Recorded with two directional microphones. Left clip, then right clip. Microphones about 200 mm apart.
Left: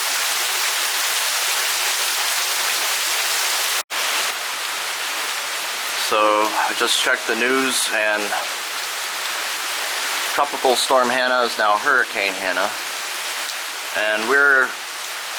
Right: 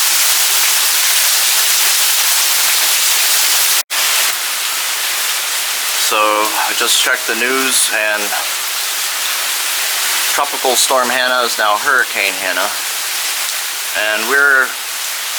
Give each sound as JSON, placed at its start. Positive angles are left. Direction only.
{"t": 6.1, "sound": "speech", "side_deg": 10}
{"t": 10.6, "sound": "speech", "side_deg": 35}
{"t": 10.9, "sound": "speech", "side_deg": 20}
{"t": 14.0, "sound": "speech", "side_deg": 15}